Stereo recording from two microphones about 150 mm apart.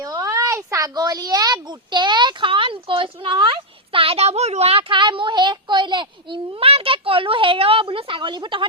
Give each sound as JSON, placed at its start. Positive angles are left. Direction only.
{"t": 0.0, "sound": "speech", "side_deg": -25}